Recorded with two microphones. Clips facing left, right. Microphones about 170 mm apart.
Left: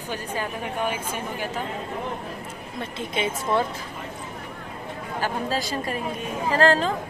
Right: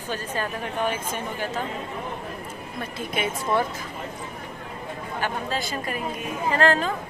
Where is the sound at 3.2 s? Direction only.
25° left (ahead or behind).